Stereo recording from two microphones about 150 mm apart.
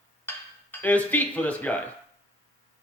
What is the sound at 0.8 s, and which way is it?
Speech, 10° left (ahead or behind).